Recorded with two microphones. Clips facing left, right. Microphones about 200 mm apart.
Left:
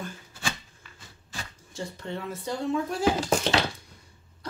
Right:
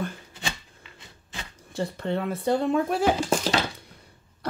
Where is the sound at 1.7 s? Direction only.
60° right (ahead or behind).